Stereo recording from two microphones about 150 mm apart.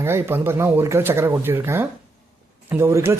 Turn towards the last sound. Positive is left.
turn(degrees=-15)  # may be behind; listen again after turning